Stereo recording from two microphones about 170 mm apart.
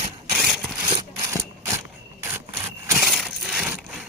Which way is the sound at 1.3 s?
15° right (ahead or behind).